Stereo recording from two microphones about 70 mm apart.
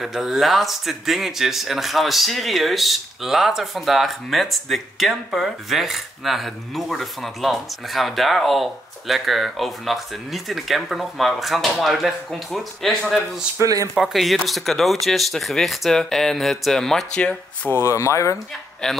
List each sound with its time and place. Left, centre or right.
0.0 s speech: centre
13.6 s speech: right
13.9 s speech: centre
17.6 s speech: left
18.8 s speech: centre